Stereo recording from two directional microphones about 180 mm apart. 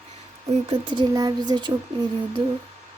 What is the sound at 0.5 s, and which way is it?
Speech, 30° right (ahead or behind).